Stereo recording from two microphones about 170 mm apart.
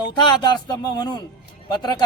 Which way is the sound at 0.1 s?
25° left (ahead or behind).